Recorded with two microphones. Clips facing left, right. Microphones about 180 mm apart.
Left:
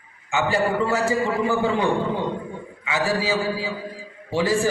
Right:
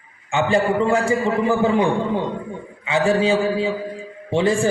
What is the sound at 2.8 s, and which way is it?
A man's voice, 25° right (ahead or behind).